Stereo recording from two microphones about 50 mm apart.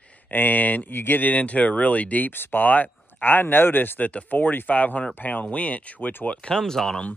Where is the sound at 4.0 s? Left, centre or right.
Left.